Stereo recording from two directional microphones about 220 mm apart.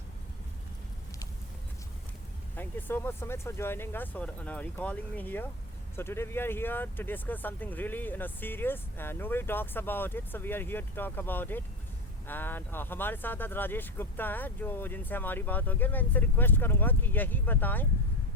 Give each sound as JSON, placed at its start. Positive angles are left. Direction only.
{"t": 2.6, "sound": "speech", "side_deg": 10}